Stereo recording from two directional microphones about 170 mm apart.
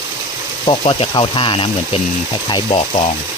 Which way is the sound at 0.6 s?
25° left (ahead or behind).